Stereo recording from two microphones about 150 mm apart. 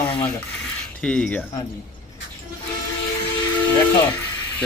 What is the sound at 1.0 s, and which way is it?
Speech, 10° left (ahead or behind).